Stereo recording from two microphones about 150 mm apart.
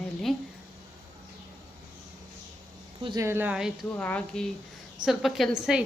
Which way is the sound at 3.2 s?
15° right (ahead or behind).